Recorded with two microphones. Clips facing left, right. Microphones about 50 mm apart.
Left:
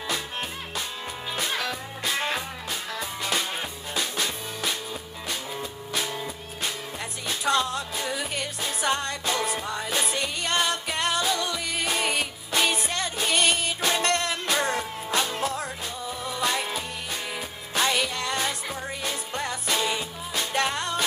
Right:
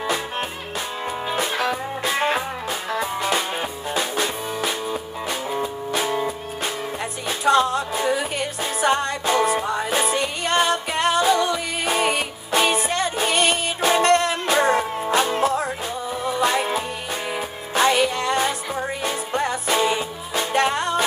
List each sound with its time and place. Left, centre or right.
0.0 s music: centre
7.2 s music: centre